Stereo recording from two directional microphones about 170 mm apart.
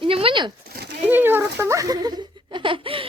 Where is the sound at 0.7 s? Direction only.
70° right (ahead or behind).